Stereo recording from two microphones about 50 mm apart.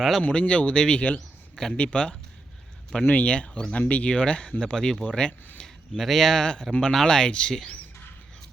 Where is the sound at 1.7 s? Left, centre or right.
Left.